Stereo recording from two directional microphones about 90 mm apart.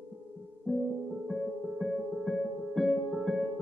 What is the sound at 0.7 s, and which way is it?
Music, 15° right (ahead or behind).